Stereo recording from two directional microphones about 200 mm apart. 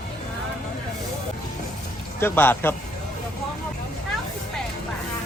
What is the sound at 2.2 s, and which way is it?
Speech, 10° left (ahead or behind).